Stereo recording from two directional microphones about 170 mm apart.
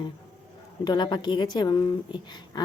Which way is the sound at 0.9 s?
25° left (ahead or behind).